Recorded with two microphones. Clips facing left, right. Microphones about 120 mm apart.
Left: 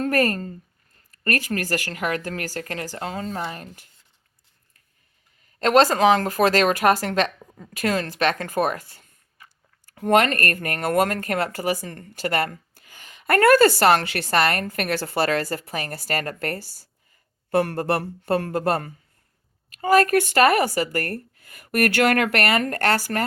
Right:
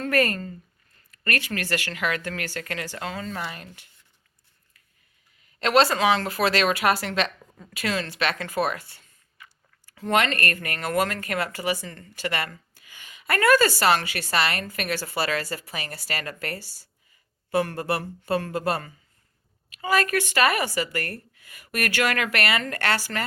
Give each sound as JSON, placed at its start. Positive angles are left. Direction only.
{"t": 0.0, "sound": "speech", "side_deg": 40}
{"t": 5.5, "sound": "speech", "side_deg": 45}